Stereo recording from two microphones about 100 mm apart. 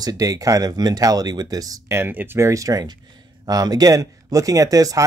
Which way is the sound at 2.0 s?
20° right (ahead or behind).